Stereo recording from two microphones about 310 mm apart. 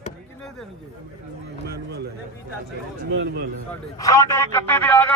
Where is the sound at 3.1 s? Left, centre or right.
Right.